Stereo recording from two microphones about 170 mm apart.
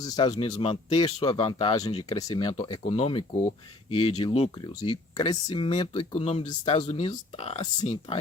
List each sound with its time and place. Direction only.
0.0 s speech: 25° left (ahead or behind)